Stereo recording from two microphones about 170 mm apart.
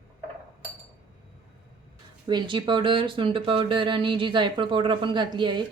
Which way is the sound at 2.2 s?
30° right (ahead or behind).